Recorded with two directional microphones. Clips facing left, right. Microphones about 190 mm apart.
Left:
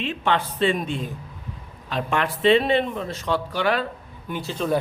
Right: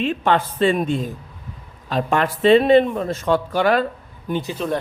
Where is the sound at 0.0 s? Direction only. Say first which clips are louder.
Right 5 dB; 45° right (ahead or behind).